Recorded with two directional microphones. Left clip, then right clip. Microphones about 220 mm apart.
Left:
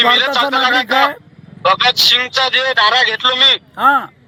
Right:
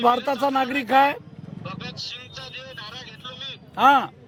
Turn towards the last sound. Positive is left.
turn(degrees=0)  # may be behind; listen again after turning